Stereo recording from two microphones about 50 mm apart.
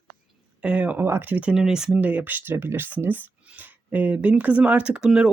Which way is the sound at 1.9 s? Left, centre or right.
Right.